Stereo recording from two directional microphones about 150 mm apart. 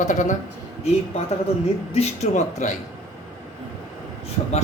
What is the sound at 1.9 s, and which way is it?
Speech, 45° left (ahead or behind).